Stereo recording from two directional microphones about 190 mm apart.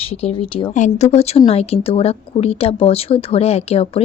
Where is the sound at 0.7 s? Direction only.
40° left (ahead or behind).